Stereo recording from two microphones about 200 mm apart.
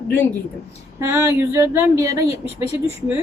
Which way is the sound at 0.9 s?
15° right (ahead or behind).